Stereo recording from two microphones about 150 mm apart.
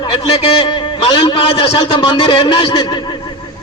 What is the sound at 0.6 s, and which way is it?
A man's voice, 35° left (ahead or behind).